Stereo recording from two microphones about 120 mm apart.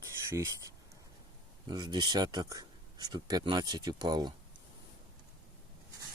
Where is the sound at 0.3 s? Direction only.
25° right (ahead or behind).